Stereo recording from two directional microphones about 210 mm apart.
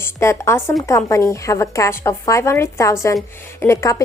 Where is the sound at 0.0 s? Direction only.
15° left (ahead or behind).